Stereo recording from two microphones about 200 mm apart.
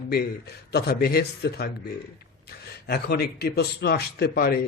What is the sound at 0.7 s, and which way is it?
Speech, 50° left (ahead or behind).